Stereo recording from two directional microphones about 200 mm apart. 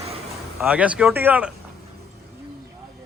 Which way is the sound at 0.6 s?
5° right (ahead or behind).